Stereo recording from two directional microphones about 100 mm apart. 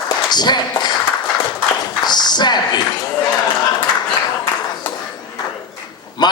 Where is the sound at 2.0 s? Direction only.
45° left (ahead or behind).